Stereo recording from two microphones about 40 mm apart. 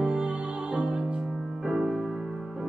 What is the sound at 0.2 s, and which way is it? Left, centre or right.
Music, right.